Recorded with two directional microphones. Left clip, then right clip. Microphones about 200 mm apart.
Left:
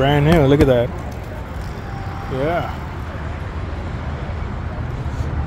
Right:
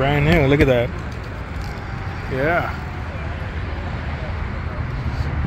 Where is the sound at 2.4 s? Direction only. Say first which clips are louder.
Right 1 dB; 5° left (ahead or behind).